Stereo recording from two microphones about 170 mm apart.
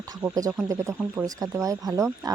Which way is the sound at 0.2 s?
15° right (ahead or behind).